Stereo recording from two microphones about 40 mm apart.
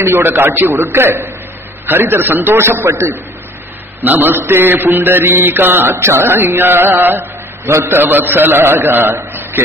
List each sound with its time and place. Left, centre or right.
0.1 s a man's voice: right
0.9 s mantra: right
4.0 s a man's voice: right
4.9 s mantra: right
8.1 s a man's voice: right